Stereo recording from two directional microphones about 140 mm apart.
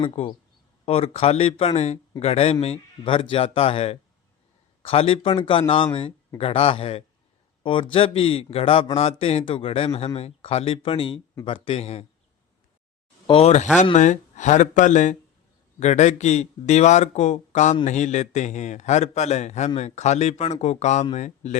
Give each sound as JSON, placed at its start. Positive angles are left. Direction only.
{"t": 0.0, "sound": "a man's voice", "side_deg": 40}
{"t": 13.2, "sound": "speech", "side_deg": 40}
{"t": 13.9, "sound": "a man's voice", "side_deg": 60}